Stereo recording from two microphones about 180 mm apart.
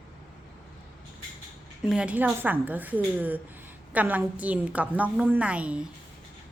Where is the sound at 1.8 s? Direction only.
5° right (ahead or behind).